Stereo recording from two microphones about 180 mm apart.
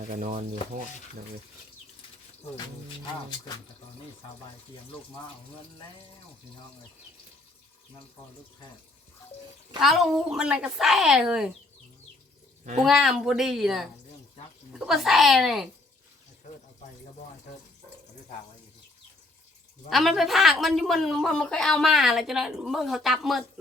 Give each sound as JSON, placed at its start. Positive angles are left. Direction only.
{"t": 0.1, "sound": "speech", "side_deg": -45}
{"t": 9.8, "sound": "a man's voice", "side_deg": 0}
{"t": 12.8, "sound": "a man's voice", "side_deg": 0}
{"t": 19.9, "sound": "a man's voice", "side_deg": 0}